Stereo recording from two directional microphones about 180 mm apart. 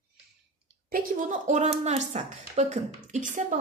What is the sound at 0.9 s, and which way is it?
A woman's voice, 45° right (ahead or behind).